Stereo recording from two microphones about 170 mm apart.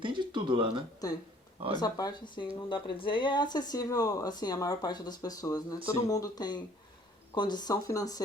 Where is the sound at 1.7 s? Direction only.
20° left (ahead or behind).